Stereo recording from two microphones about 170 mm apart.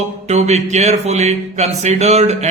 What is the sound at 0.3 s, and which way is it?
A man's voice, 40° right (ahead or behind).